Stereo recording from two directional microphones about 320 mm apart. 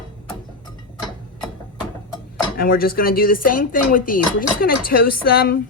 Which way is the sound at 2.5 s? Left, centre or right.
Left.